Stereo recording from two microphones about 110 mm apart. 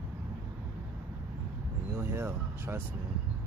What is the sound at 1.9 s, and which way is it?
Speech, 20° right (ahead or behind).